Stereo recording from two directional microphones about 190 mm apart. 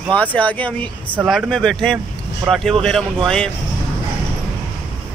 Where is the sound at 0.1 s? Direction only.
5° left (ahead or behind).